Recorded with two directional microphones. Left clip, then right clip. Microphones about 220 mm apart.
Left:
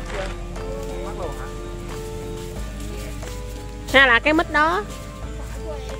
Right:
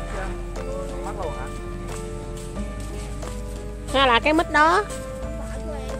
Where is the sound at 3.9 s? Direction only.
15° left (ahead or behind).